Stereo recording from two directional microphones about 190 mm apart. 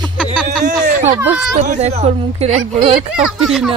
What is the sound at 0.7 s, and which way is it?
A woman's voice, 45° right (ahead or behind).